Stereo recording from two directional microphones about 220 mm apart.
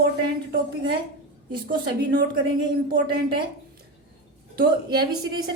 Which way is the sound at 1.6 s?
45° right (ahead or behind).